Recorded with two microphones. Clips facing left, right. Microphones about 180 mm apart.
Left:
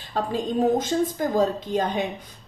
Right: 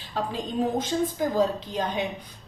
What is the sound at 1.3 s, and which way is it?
Speech, 50° left (ahead or behind).